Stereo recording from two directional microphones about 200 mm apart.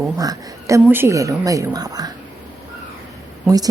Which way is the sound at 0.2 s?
20° right (ahead or behind).